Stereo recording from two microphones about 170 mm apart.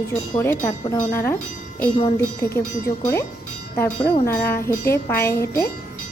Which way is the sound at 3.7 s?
10° left (ahead or behind).